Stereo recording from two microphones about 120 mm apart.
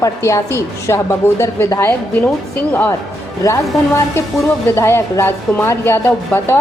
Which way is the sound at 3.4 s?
30° left (ahead or behind).